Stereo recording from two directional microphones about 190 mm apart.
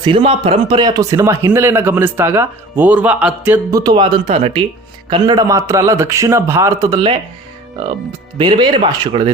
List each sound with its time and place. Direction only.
0.0 s speech: 30° right (ahead or behind)
8.4 s speech: 25° right (ahead or behind)